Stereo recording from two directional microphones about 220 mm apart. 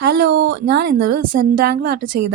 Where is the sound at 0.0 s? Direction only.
45° right (ahead or behind).